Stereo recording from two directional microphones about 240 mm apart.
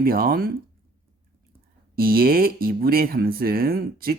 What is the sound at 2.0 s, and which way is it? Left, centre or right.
Speech, right.